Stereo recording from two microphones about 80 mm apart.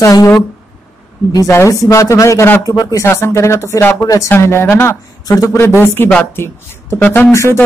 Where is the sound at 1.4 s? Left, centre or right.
Left.